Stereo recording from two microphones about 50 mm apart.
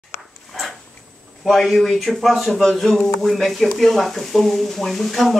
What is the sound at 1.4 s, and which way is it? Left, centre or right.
Speech, centre.